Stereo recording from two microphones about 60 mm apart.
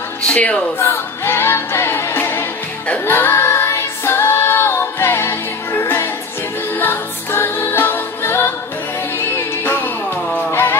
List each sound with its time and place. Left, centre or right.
0.2 s speech: left
0.7 s music: left
10.5 s music: left